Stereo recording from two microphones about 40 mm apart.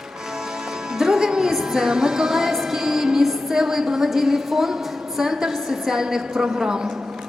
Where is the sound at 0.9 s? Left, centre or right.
Centre.